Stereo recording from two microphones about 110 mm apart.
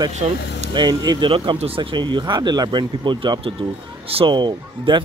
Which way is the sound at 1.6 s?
55° right (ahead or behind).